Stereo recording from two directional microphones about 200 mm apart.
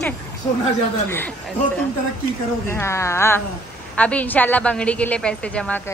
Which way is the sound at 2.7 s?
15° left (ahead or behind).